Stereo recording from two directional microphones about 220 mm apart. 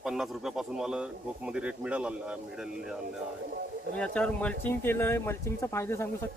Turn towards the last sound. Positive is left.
turn(degrees=10)  # may be behind; listen again after turning